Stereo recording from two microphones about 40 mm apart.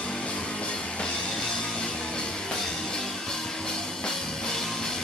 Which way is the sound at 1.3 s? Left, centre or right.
Centre.